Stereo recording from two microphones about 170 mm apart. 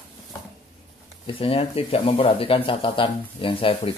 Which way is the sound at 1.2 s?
30° left (ahead or behind).